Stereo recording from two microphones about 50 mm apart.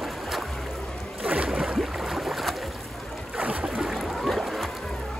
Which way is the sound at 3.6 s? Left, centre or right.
Centre.